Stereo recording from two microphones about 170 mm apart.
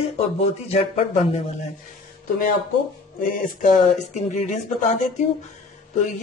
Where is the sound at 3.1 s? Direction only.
55° left (ahead or behind).